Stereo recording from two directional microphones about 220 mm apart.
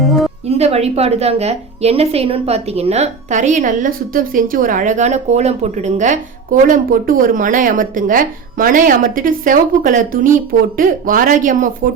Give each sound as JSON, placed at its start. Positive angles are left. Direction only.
{"t": 0.0, "sound": "music", "side_deg": 0}
{"t": 0.4, "sound": "a woman's voice", "side_deg": -30}